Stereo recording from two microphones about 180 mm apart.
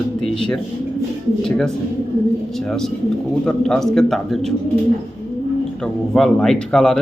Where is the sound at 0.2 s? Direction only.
5° left (ahead or behind).